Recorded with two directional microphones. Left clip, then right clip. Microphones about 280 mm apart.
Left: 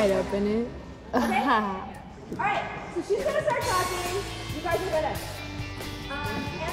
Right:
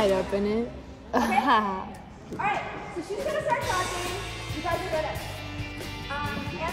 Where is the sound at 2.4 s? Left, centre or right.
Right.